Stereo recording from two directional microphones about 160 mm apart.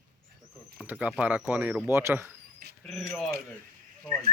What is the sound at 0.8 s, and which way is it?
Speech, 10° right (ahead or behind).